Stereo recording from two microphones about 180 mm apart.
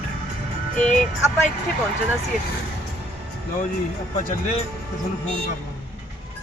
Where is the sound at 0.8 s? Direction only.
5° left (ahead or behind).